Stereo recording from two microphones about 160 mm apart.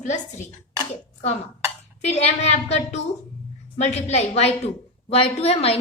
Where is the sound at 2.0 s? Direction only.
40° left (ahead or behind).